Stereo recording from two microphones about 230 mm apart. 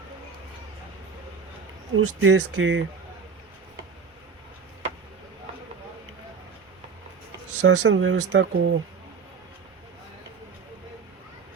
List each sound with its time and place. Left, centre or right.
2.0 s speech: right
7.5 s speech: right
7.9 s speech: right